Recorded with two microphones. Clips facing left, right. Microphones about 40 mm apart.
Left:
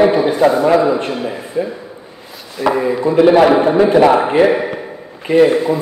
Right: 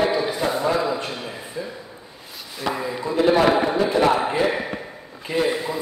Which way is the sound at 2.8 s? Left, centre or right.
Left.